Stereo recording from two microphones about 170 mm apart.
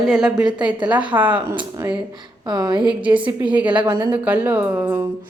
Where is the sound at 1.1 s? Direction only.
20° right (ahead or behind).